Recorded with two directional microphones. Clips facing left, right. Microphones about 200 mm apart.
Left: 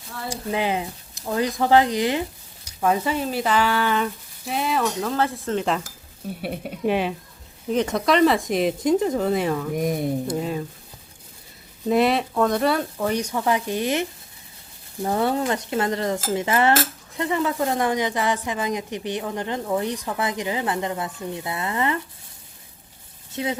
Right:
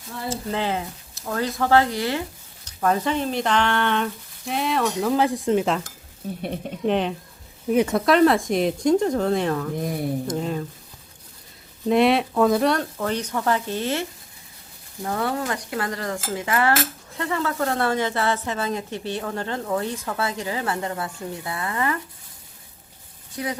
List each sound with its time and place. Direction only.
0.3 s a woman's voice: 15° left (ahead or behind)
2.6 s speech: 5° left (ahead or behind)
5.0 s speech: 15° right (ahead or behind)
5.6 s a woman's voice: centre (ahead or behind)
7.7 s a woman's voice: 5° right (ahead or behind)
11.9 s a woman's voice: centre (ahead or behind)
15.0 s stir: 25° left (ahead or behind)
17.2 s a woman's voice: 15° left (ahead or behind)
23.3 s stir: 25° left (ahead or behind)